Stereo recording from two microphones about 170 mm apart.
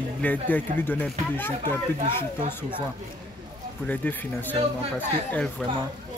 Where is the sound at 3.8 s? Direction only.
10° left (ahead or behind).